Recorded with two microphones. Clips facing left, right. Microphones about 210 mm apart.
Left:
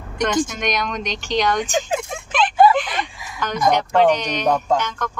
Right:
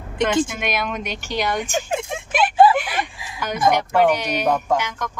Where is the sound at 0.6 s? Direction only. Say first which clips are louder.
Left 1 dB; 5° right (ahead or behind).